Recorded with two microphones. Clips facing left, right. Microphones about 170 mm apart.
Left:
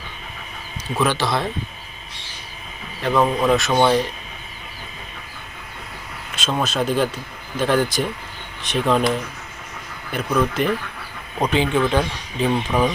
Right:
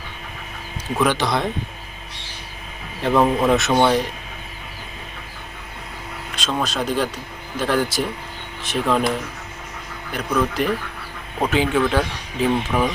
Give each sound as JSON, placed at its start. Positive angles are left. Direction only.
{"t": 0.9, "sound": "speech", "side_deg": -15}
{"t": 3.0, "sound": "speech", "side_deg": -5}
{"t": 6.3, "sound": "speech", "side_deg": 0}
{"t": 10.6, "sound": "speech", "side_deg": 0}